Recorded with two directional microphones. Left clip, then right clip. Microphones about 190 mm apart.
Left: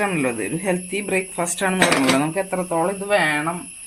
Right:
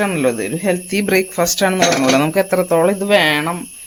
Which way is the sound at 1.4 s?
30° right (ahead or behind).